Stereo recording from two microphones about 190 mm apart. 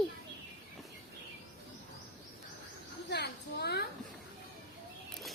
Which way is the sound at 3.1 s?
60° left (ahead or behind).